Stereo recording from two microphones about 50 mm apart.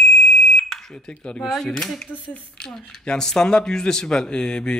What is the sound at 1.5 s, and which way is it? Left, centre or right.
Speech, centre.